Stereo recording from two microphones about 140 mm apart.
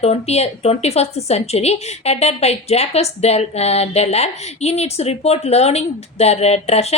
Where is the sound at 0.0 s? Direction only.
50° left (ahead or behind).